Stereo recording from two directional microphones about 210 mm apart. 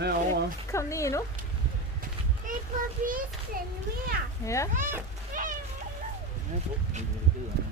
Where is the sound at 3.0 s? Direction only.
40° right (ahead or behind).